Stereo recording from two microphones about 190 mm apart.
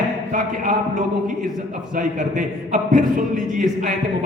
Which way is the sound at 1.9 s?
45° right (ahead or behind).